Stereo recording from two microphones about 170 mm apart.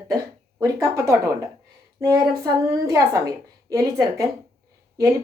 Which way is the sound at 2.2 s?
20° right (ahead or behind).